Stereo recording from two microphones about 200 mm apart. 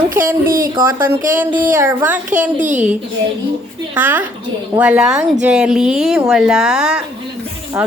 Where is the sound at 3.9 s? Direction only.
10° right (ahead or behind).